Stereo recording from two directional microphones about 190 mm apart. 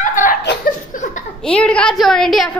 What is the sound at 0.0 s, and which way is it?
Chuckle, 45° left (ahead or behind).